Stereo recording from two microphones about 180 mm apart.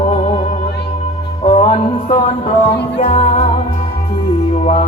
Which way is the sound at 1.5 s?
35° left (ahead or behind).